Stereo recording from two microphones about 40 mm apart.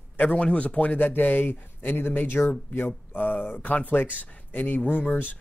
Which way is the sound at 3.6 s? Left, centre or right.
Left.